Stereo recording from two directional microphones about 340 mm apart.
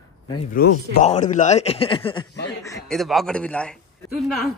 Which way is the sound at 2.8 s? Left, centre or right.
Centre.